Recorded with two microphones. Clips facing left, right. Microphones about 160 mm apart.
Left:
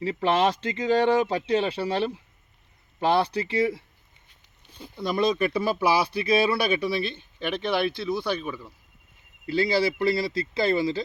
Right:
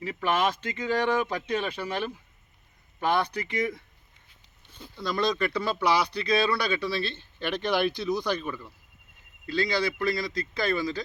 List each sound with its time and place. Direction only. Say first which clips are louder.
0.0 s speech: left 4 dB; 30° left (ahead or behind)
4.9 s speech: left 3 dB; 25° left (ahead or behind)
7.2 s speech: left 1 dB; centre (ahead or behind)
9.5 s speech: left 4 dB; 25° left (ahead or behind)